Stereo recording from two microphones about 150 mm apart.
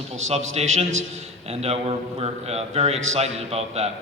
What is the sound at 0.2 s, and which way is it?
A man's voice, 50° right (ahead or behind).